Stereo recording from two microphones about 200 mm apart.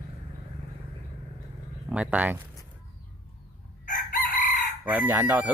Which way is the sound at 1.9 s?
5° right (ahead or behind).